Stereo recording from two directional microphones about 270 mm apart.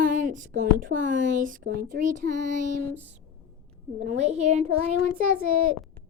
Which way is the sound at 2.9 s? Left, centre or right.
Centre.